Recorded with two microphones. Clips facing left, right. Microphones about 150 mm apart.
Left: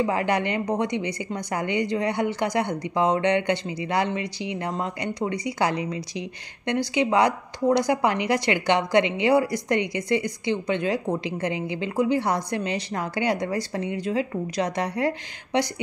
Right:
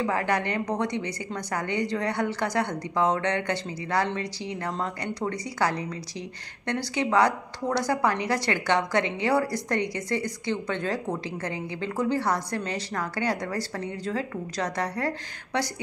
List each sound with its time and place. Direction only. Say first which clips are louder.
0.0 s a woman's voice: left 3 dB; 15° left (ahead or behind)